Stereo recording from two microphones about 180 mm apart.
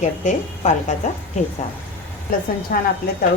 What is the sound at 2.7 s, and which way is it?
Speech, 55° left (ahead or behind).